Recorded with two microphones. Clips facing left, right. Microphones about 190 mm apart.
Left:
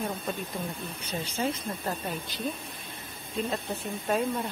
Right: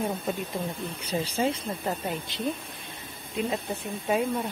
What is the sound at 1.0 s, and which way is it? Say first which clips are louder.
Speech: right 4 dB; 30° right (ahead or behind).